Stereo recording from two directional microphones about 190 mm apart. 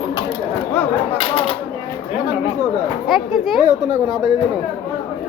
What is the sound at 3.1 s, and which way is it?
Speech, centre (ahead or behind).